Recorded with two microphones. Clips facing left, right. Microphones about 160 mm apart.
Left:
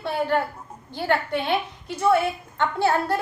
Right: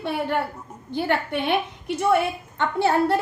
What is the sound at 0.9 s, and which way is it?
A woman's voice, 20° right (ahead or behind).